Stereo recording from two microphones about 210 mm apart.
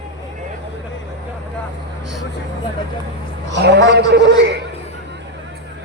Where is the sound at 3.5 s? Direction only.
55° right (ahead or behind).